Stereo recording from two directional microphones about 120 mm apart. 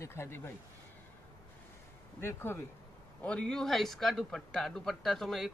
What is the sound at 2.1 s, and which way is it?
Speech, 20° left (ahead or behind).